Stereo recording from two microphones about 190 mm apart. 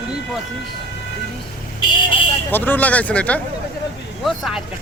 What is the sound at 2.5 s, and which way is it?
Speech, 10° left (ahead or behind).